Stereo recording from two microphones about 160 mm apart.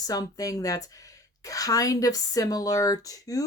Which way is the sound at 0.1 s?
20° left (ahead or behind).